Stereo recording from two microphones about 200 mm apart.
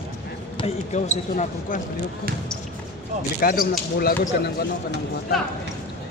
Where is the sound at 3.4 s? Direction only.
45° left (ahead or behind).